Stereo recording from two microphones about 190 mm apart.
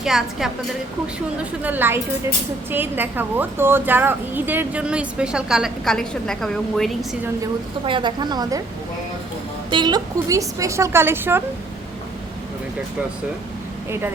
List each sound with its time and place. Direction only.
0.0 s a woman's voice: centre (ahead or behind)
1.6 s a woman's voice: 10° right (ahead or behind)
7.9 s a woman's voice: 25° right (ahead or behind)
9.6 s a woman's voice: 25° right (ahead or behind)